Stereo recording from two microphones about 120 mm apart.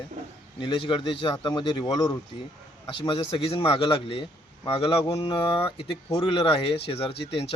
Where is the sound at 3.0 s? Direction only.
45° left (ahead or behind).